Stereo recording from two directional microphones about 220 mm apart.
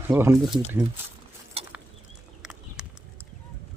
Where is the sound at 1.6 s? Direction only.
25° right (ahead or behind).